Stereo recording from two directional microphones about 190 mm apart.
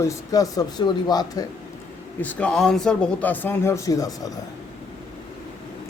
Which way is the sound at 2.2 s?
5° left (ahead or behind).